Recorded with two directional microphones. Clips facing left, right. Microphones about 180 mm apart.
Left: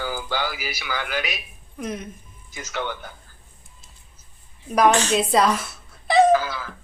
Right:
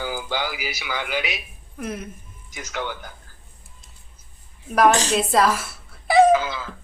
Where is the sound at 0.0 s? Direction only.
15° right (ahead or behind).